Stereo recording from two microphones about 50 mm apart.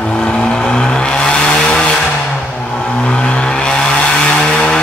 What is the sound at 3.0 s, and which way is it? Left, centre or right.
Vehicle, centre.